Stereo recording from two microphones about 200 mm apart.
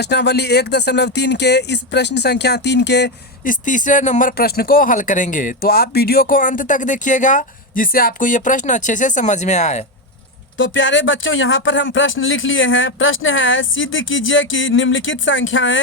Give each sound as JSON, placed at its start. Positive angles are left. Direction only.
{"t": 0.0, "sound": "speech", "side_deg": 55}
{"t": 3.5, "sound": "speech", "side_deg": 40}
{"t": 10.6, "sound": "speech", "side_deg": 65}